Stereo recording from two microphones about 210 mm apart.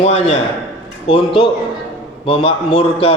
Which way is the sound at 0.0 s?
30° left (ahead or behind).